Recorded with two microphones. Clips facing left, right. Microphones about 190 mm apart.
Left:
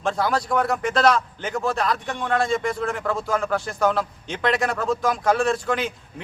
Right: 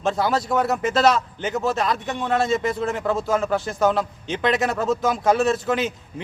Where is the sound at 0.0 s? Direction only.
5° right (ahead or behind).